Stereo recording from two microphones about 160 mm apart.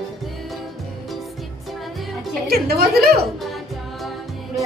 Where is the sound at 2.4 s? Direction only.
75° right (ahead or behind).